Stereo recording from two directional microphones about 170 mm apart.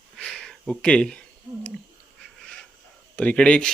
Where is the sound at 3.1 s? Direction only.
10° left (ahead or behind).